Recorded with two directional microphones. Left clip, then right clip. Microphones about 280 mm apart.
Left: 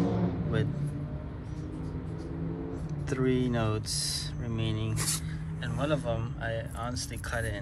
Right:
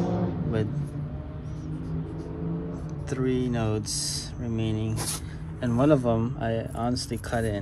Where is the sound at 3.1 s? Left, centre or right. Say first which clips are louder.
Right 1 dB; centre.